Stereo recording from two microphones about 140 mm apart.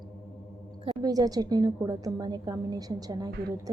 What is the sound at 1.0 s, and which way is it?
A woman's voice, 25° right (ahead or behind).